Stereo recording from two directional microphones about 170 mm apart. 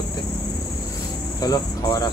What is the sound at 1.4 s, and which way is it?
Speech, 20° left (ahead or behind).